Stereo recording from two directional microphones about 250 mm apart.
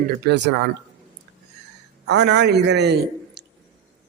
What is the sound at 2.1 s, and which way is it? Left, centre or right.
Speech, right.